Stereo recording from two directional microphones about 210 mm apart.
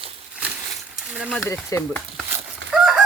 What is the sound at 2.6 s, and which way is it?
Chicken, 60° right (ahead or behind).